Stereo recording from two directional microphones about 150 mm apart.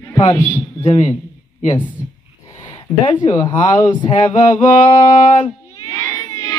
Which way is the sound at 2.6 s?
30° left (ahead or behind).